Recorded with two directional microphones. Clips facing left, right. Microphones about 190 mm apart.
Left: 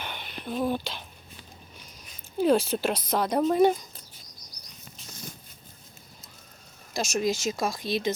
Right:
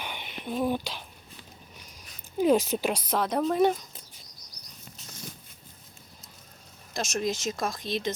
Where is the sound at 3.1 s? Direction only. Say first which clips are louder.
Left 3 dB; centre (ahead or behind).